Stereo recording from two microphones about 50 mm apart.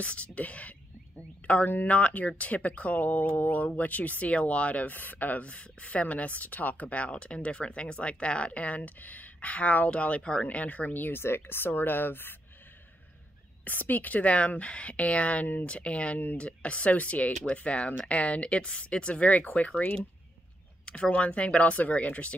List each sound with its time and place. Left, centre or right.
0.0 s speech: left
13.7 s speech: left